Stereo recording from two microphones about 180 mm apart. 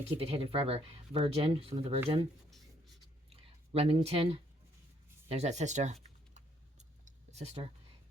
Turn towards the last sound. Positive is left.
turn(degrees=-35)  # may be behind; listen again after turning